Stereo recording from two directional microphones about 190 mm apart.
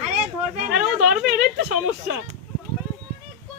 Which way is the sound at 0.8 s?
5° right (ahead or behind).